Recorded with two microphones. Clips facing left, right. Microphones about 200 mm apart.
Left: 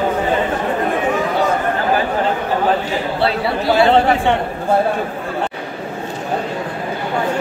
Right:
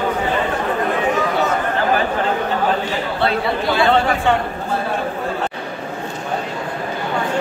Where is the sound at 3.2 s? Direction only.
35° left (ahead or behind).